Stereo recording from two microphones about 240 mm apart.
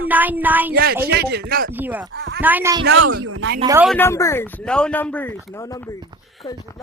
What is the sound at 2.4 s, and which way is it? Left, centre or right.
Speech, centre.